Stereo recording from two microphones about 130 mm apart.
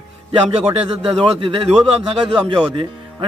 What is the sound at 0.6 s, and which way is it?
A man's voice, 50° right (ahead or behind).